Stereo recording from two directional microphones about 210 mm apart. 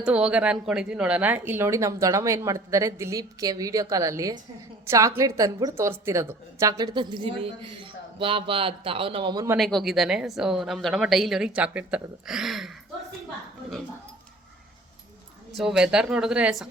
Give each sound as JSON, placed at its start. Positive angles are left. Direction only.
{"t": 0.0, "sound": "a woman's voice", "side_deg": -5}
{"t": 9.6, "sound": "a woman's voice", "side_deg": 0}
{"t": 15.5, "sound": "a woman's voice", "side_deg": -5}